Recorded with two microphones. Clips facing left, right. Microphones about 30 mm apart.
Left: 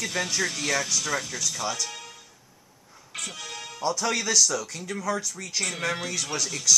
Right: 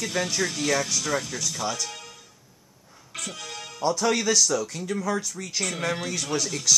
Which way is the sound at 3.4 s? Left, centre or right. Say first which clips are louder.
Right 2 dB; centre.